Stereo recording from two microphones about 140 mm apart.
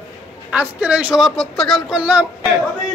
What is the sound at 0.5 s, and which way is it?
Speech, 10° right (ahead or behind).